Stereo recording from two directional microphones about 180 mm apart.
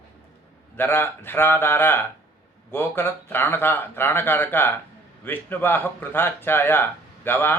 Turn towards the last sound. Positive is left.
turn(degrees=10)  # may be behind; listen again after turning